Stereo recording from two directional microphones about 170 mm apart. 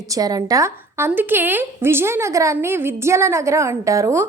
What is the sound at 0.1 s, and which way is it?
A woman's voice, 20° right (ahead or behind).